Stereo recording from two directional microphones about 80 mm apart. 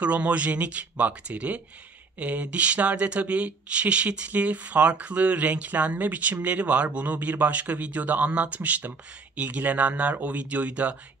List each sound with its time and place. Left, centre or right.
0.0 s speech: centre